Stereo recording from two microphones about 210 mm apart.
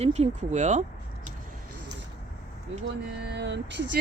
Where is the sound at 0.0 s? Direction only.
30° right (ahead or behind).